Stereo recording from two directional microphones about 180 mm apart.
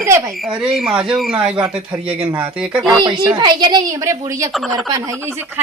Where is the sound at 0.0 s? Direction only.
15° right (ahead or behind).